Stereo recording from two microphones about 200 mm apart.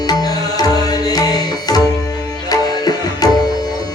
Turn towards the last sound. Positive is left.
turn(degrees=20)  # may be behind; listen again after turning